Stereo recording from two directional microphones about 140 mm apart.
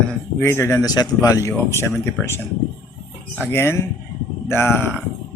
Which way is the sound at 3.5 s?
20° left (ahead or behind).